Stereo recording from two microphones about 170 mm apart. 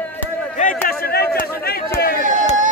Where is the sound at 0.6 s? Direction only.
55° left (ahead or behind).